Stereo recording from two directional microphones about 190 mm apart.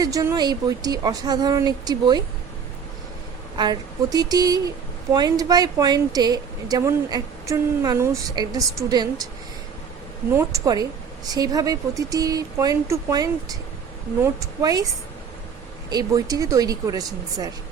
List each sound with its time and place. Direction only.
0.0 s speech: 20° right (ahead or behind)
3.6 s speech: 20° right (ahead or behind)
10.3 s a woman's voice: 20° right (ahead or behind)
15.9 s speech: 20° right (ahead or behind)